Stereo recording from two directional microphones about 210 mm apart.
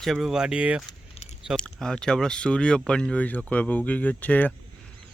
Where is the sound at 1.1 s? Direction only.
30° left (ahead or behind).